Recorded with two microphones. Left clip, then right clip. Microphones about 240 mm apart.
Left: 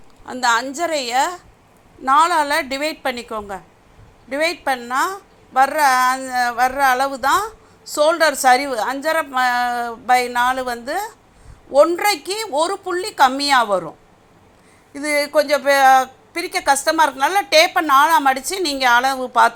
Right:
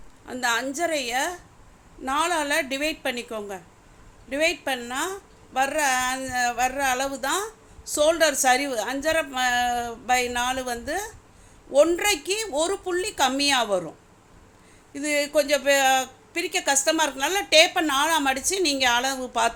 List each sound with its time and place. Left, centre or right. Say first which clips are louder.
0.3 s a woman's voice: left 7 dB; centre
4.3 s a woman's voice: left 5 dB; centre
12.5 s a woman's voice: left 8 dB; centre
12.9 s a woman's voice: left 8 dB; centre
14.9 s a woman's voice: left 6 dB; centre